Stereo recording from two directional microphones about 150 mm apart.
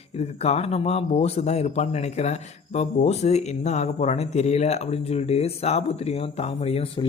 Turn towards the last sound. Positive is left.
turn(degrees=45)  # may be behind; listen again after turning